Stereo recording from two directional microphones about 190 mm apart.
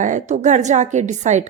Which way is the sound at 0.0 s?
40° right (ahead or behind).